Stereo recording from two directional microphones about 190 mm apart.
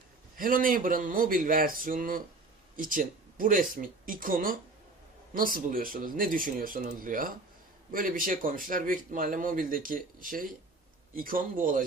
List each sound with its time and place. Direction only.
0.4 s speech: 45° right (ahead or behind)